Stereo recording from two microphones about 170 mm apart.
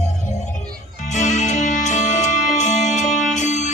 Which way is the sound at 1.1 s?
45° left (ahead or behind).